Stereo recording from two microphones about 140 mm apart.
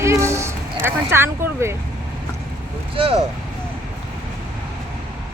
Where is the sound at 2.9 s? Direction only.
40° right (ahead or behind).